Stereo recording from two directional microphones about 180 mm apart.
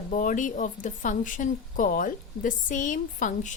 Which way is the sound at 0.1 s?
45° left (ahead or behind).